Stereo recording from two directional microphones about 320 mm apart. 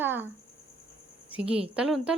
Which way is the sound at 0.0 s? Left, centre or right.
Centre.